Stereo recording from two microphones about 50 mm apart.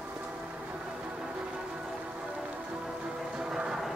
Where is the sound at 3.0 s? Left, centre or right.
Centre.